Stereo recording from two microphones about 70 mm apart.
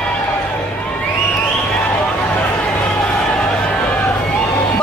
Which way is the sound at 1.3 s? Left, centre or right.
Centre.